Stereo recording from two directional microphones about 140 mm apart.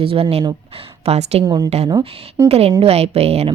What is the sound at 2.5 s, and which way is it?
Speech, 45° right (ahead or behind).